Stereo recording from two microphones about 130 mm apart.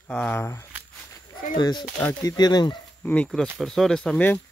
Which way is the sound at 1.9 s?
10° left (ahead or behind).